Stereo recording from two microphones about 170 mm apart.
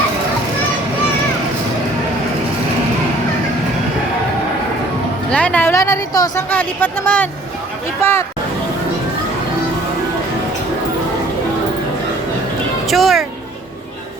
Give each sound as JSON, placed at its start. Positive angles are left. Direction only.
{"t": 5.3, "sound": "speech", "side_deg": 5}
{"t": 12.9, "sound": "speech", "side_deg": 0}